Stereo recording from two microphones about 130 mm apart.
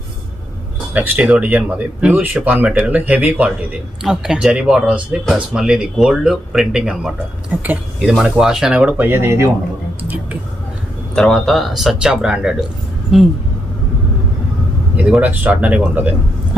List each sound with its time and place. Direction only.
0.9 s speech: 15° right (ahead or behind)
11.1 s speech: 5° left (ahead or behind)
14.9 s speech: 10° right (ahead or behind)